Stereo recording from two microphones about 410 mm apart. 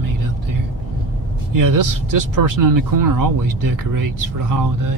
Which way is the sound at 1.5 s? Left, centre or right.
Right.